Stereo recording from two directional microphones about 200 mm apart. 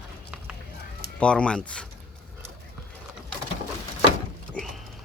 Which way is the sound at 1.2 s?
5° left (ahead or behind).